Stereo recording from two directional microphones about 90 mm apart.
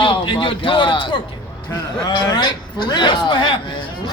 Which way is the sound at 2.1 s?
55° left (ahead or behind).